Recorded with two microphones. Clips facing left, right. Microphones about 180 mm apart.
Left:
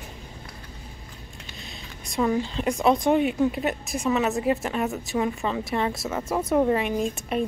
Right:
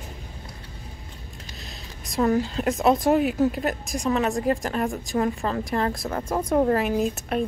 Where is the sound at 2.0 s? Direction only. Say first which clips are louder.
Right 2 dB; centre (ahead or behind).